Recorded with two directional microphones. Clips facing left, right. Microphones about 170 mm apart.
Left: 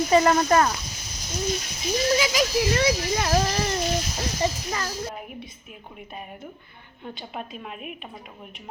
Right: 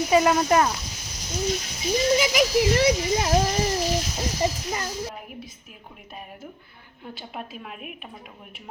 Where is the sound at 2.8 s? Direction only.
20° right (ahead or behind).